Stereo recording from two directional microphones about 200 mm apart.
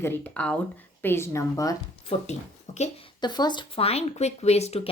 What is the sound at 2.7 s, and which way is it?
Speech, 35° left (ahead or behind).